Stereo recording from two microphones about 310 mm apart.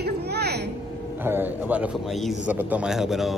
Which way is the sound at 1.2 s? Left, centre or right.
Centre.